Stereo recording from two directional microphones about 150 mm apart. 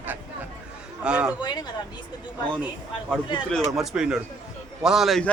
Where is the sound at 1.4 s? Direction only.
30° left (ahead or behind).